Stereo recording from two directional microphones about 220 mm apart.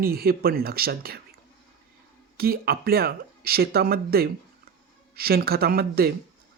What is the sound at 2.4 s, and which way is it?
Speech, 45° right (ahead or behind).